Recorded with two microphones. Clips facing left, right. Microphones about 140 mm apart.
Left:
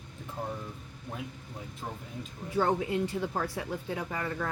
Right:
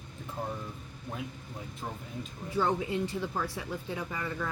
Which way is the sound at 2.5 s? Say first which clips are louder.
Left 2 dB; 55° left (ahead or behind).